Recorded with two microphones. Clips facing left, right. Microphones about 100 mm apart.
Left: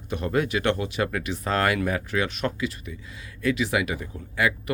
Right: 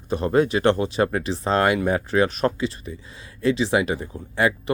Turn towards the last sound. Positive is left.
turn(degrees=-30)  # may be behind; listen again after turning